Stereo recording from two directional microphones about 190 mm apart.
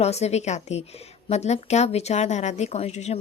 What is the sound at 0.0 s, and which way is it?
A woman's voice, 35° left (ahead or behind).